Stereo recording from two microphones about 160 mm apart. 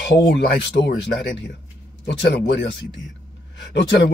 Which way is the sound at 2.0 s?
90° left.